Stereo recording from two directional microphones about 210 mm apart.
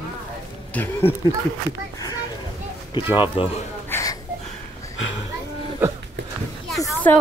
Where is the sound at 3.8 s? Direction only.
10° left (ahead or behind).